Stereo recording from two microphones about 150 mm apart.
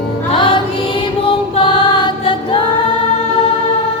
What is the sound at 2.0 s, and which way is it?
Choir, 35° left (ahead or behind).